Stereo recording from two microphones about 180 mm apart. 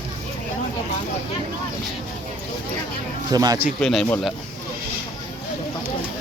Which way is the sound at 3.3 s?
20° right (ahead or behind).